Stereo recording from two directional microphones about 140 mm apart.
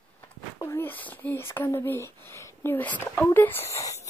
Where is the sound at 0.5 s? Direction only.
20° left (ahead or behind).